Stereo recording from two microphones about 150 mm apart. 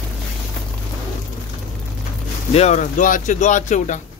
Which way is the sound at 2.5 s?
50° left (ahead or behind).